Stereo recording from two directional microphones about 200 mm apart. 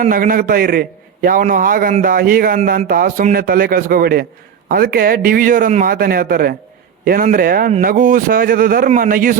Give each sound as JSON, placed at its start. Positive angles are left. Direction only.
{"t": 0.0, "sound": "a man's voice", "side_deg": -45}